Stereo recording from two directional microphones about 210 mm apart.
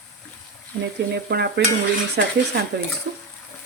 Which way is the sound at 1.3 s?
50° right (ahead or behind).